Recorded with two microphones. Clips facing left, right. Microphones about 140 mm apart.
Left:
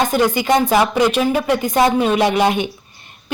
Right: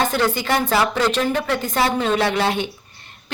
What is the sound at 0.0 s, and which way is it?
A woman's voice, 15° left (ahead or behind).